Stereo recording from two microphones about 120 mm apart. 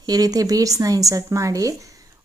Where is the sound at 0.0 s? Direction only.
30° right (ahead or behind).